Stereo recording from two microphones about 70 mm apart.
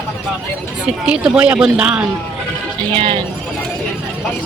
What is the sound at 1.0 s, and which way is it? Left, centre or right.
Speech, centre.